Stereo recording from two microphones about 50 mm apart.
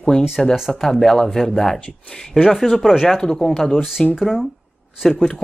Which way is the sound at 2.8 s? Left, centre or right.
Centre.